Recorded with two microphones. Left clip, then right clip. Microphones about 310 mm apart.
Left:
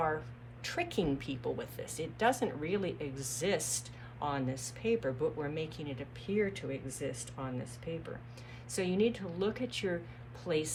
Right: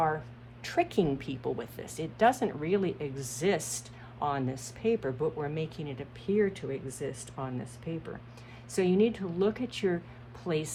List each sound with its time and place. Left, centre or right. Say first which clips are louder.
0.0 s a woman's voice: right 4 dB; right